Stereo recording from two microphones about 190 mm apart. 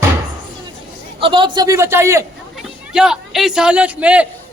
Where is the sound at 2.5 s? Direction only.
5° right (ahead or behind).